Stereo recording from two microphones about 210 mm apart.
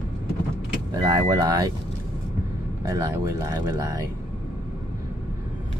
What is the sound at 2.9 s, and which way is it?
Speech, 15° right (ahead or behind).